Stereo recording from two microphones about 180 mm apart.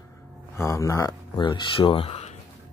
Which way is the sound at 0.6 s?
15° left (ahead or behind).